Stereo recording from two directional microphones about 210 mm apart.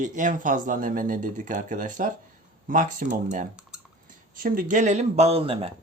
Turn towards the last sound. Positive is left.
turn(degrees=-25)  # may be behind; listen again after turning